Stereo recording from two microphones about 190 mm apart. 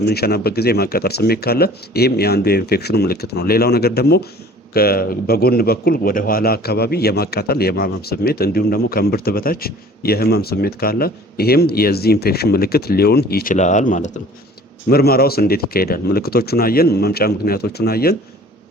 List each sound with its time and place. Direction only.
0.0 s a man's voice: 55° left (ahead or behind); by 14.2 s 40° left (ahead or behind)
14.8 s a man's voice: 55° left (ahead or behind)